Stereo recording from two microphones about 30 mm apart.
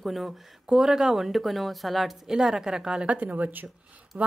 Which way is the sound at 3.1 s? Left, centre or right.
Right.